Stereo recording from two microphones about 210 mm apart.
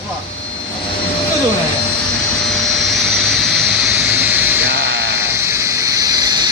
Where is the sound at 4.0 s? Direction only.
10° right (ahead or behind).